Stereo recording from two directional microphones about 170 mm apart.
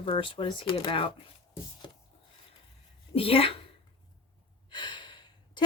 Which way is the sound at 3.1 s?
35° left (ahead or behind).